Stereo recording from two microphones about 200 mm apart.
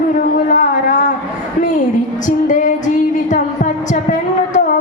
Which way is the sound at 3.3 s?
40° left (ahead or behind).